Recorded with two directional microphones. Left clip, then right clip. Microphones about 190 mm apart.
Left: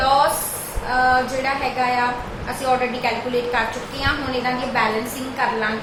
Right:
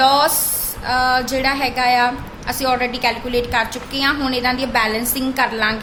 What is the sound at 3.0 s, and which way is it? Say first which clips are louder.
A woman's voice: right 2 dB; 60° right (ahead or behind).